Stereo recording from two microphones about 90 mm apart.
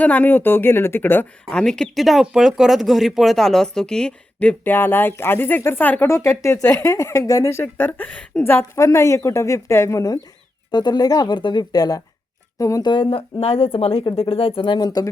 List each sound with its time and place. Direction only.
0.0 s speech: 20° left (ahead or behind)
1.5 s speech: 10° left (ahead or behind)
6.1 s speech: 35° left (ahead or behind); by 8.4 s 15° left (ahead or behind)
8.4 s speech: 25° left (ahead or behind)
10.7 s speech: 50° left (ahead or behind)
12.8 s speech: 70° left (ahead or behind); by 15.0 s 50° left (ahead or behind)